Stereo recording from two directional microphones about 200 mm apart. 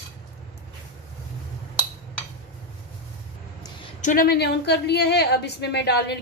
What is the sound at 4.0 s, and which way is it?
A woman's voice, 40° left (ahead or behind).